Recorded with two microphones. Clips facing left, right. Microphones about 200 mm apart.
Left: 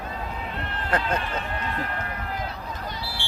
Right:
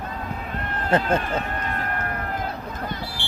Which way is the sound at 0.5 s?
45° right (ahead or behind).